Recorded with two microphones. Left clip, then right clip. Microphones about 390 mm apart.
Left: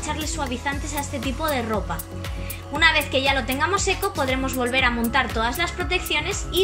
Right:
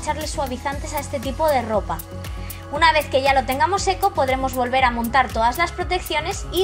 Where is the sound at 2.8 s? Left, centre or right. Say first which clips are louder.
Right 2 dB; centre.